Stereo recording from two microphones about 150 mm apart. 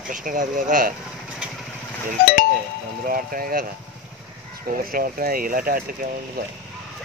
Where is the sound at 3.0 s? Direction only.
70° right (ahead or behind).